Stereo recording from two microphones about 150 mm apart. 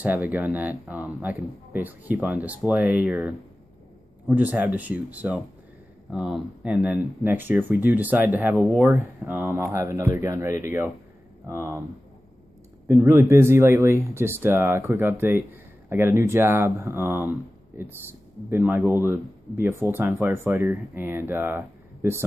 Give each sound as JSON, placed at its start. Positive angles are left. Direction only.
{"t": 0.0, "sound": "speech", "side_deg": -10}
{"t": 12.8, "sound": "speech", "side_deg": -20}